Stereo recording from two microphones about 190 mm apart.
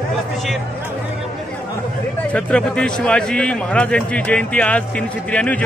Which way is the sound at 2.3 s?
5° left (ahead or behind).